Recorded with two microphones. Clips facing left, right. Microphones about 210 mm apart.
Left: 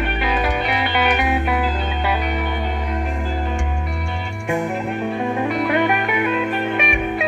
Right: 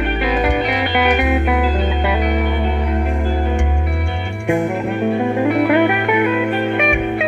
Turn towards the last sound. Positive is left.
turn(degrees=-65)  # may be behind; listen again after turning